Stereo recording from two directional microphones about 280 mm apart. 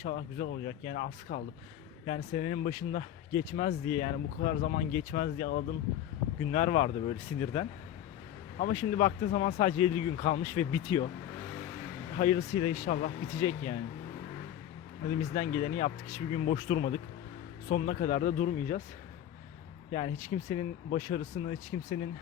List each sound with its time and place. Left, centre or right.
0.0 s speech: left
9.8 s speech: left
10.2 s speech: left
12.1 s speech: left
15.0 s speech: left
19.9 s speech: left